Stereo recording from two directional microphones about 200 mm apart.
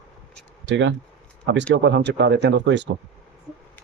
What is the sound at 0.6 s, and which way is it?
Speech, 65° right (ahead or behind).